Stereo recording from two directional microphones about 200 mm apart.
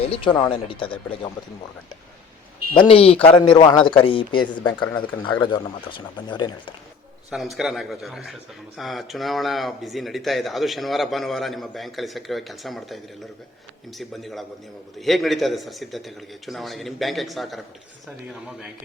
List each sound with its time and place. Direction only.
0.0 s speech: 30° left (ahead or behind)
2.7 s speech: 25° left (ahead or behind)
7.3 s speech: centre (ahead or behind)
14.0 s speech: centre (ahead or behind)